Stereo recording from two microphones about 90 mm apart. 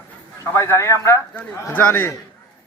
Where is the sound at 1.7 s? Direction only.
20° left (ahead or behind).